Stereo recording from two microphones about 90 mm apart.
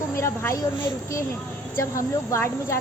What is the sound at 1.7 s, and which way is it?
A woman's voice, 35° left (ahead or behind).